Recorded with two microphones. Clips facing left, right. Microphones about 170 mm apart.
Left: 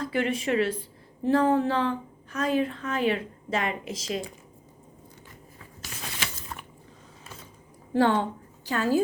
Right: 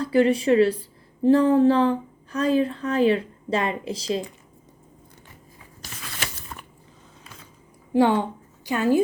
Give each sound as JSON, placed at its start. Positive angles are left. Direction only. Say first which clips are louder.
{"t": 0.0, "sound": "a woman's voice", "louder": "right 8 dB", "side_deg": -35}
{"t": 7.9, "sound": "a woman's voice", "louder": "right 3 dB", "side_deg": -15}